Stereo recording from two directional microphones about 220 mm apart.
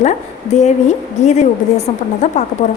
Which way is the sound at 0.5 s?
30° left (ahead or behind).